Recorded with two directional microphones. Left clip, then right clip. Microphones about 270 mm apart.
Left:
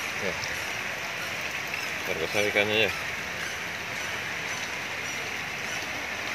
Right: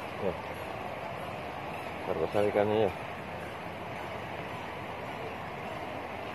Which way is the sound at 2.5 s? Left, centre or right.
Centre.